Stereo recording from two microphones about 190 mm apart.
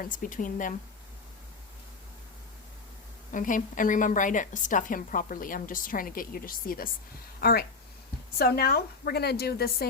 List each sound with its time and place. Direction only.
0.0 s a woman's voice: 45° left (ahead or behind)
3.3 s a woman's voice: 45° left (ahead or behind)
8.4 s a woman's voice: 55° left (ahead or behind)